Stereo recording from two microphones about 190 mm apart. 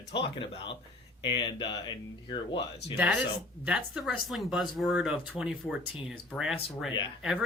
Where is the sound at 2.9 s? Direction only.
5° right (ahead or behind).